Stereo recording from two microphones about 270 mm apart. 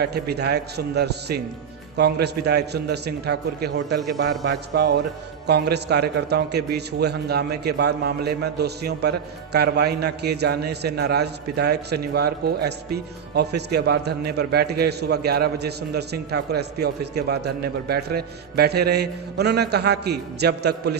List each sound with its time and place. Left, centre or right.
0.0 s a man's voice: right